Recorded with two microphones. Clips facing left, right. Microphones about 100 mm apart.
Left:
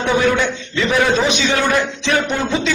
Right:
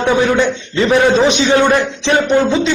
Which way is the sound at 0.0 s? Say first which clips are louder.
Right 3 dB; 35° right (ahead or behind).